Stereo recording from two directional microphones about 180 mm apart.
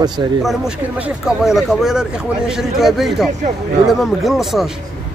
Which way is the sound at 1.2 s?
Centre (ahead or behind).